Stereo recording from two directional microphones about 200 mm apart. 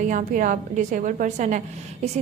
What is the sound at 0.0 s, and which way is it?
A woman's voice, 40° right (ahead or behind).